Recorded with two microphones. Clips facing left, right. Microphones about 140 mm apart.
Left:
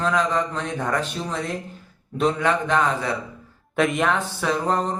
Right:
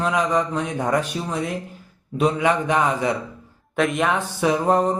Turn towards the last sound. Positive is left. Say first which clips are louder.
# right 4 dB
turn(degrees=-15)  # may be behind; listen again after turning